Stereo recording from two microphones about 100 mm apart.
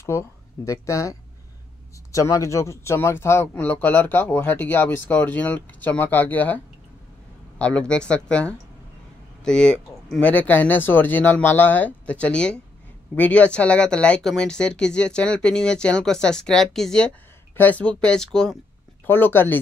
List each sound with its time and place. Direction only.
0.1 s speech: 25° left (ahead or behind)
2.1 s speech: 35° left (ahead or behind); by 10.3 s 5° left (ahead or behind)
10.3 s speech: 15° left (ahead or behind)
19.0 s speech: 20° left (ahead or behind)